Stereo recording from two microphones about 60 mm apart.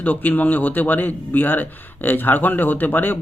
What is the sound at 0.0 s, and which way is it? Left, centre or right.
A man's voice, left.